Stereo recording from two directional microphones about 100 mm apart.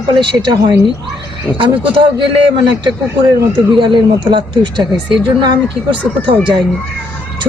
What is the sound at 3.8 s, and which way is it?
Speech, 55° right (ahead or behind).